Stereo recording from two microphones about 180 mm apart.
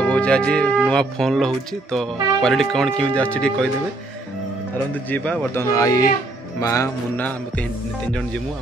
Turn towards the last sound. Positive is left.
turn(degrees=15)  # may be behind; listen again after turning